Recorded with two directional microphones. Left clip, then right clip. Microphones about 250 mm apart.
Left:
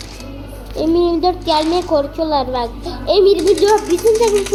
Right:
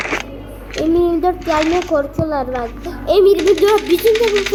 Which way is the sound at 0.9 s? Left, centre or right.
Right.